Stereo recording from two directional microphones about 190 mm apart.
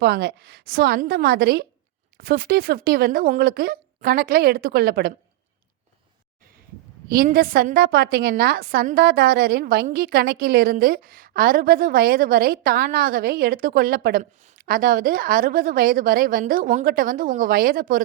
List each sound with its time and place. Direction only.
0.0 s a woman's voice: 60° right (ahead or behind)
7.1 s a woman's voice: 50° right (ahead or behind)